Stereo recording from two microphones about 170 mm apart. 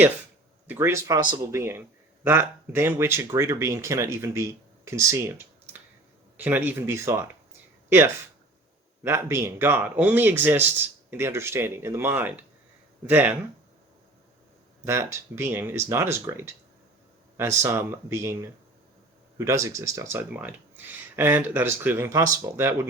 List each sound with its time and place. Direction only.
0.7 s speech: 15° right (ahead or behind)
14.8 s speech: 15° right (ahead or behind)
19.4 s speech: 15° right (ahead or behind)